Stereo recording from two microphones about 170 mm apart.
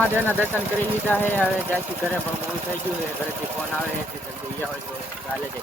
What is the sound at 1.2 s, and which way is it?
Speech, 10° left (ahead or behind).